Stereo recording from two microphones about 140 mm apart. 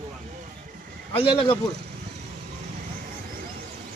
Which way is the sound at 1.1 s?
40° left (ahead or behind).